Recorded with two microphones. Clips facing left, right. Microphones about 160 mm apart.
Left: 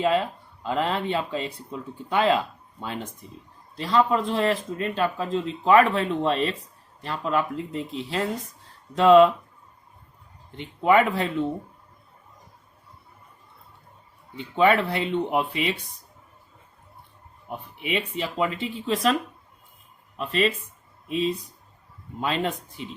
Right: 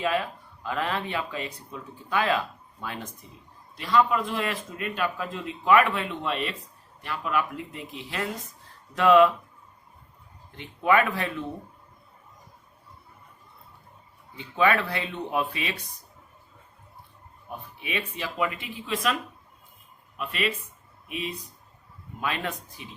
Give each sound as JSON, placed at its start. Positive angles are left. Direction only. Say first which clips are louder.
{"t": 0.0, "sound": "speech", "louder": "left 4 dB", "side_deg": 25}
{"t": 10.6, "sound": "speech", "louder": "left 3 dB", "side_deg": 25}
{"t": 14.3, "sound": "speech", "louder": "left 3 dB", "side_deg": 25}
{"t": 17.8, "sound": "speech", "louder": "left 5 dB", "side_deg": 25}
{"t": 20.1, "sound": "speech", "louder": "left 5 dB", "side_deg": 30}